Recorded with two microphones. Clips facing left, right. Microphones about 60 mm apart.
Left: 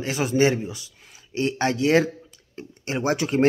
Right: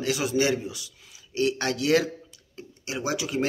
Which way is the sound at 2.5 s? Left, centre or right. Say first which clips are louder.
Left 5 dB; left.